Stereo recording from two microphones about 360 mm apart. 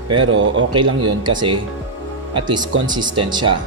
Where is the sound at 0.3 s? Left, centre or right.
Right.